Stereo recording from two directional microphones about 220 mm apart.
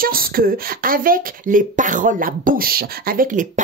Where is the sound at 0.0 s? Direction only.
40° right (ahead or behind).